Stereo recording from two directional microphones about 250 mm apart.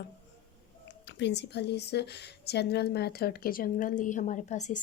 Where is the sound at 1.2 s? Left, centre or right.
Left.